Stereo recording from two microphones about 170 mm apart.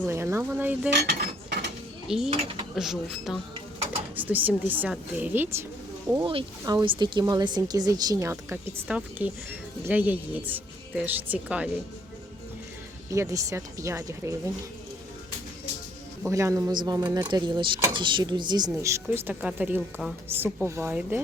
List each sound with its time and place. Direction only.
0.0 s speech: 15° right (ahead or behind)
2.0 s speech: 5° right (ahead or behind)
6.2 s speech: 30° right (ahead or behind); by 11.7 s 10° right (ahead or behind)
13.1 s speech: 20° right (ahead or behind)
16.2 s speech: 15° right (ahead or behind)